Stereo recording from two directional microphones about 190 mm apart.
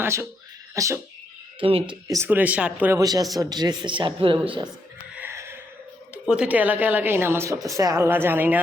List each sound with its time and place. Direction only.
0.0 s a woman's voice: 15° right (ahead or behind)
1.5 s speech: 30° right (ahead or behind)
2.0 s a woman's voice: 15° right (ahead or behind)
3.0 s speech: 20° right (ahead or behind)
5.1 s a sound: 10° right (ahead or behind)
6.2 s a woman's voice: 5° right (ahead or behind)